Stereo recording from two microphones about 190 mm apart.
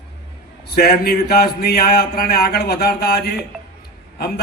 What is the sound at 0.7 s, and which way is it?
Speech, 55° left (ahead or behind).